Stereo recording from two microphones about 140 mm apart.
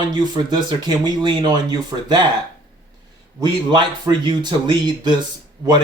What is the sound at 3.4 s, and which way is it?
Speech, 35° right (ahead or behind).